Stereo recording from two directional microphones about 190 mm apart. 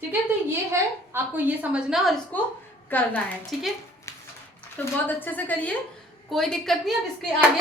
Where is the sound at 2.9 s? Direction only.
10° left (ahead or behind).